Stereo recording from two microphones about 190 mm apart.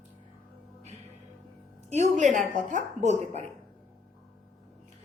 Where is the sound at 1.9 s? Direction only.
40° right (ahead or behind).